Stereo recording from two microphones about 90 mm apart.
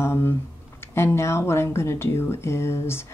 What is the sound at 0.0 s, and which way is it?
Speech, 25° left (ahead or behind).